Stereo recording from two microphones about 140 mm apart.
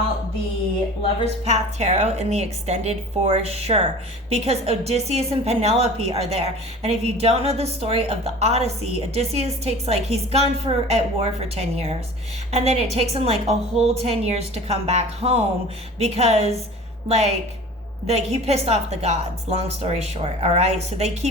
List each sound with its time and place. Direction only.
1.2 s a woman's voice: 50° right (ahead or behind)